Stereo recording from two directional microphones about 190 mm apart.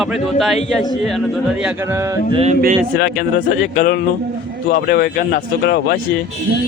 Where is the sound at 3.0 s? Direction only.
55° left (ahead or behind).